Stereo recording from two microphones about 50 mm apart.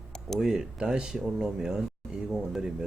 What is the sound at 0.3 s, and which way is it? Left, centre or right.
Speech, centre.